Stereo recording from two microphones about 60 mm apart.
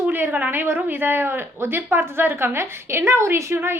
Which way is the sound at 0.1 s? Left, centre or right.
Right.